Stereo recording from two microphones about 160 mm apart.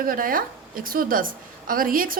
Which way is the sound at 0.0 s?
60° right (ahead or behind).